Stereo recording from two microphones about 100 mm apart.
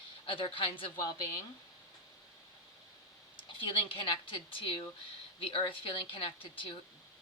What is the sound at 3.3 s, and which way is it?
Speech, 60° left (ahead or behind).